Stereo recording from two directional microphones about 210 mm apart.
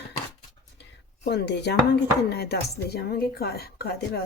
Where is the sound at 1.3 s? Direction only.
55° left (ahead or behind).